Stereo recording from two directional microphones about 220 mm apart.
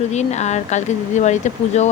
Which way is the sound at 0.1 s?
30° left (ahead or behind).